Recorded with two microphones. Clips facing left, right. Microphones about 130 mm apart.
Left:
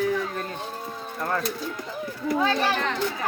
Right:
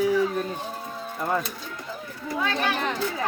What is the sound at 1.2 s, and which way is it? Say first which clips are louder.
Speech: right 2 dB; 10° right (ahead or behind).